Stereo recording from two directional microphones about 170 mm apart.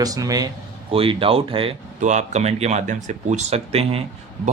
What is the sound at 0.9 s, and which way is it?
Speech, 35° right (ahead or behind).